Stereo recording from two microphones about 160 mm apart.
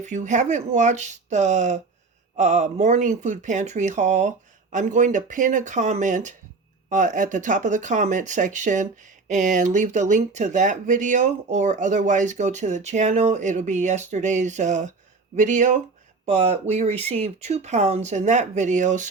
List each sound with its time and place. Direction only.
0.0 s speech: 50° right (ahead or behind)